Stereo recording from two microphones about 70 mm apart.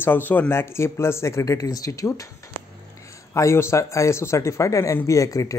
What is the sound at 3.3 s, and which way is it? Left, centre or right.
Speech, left.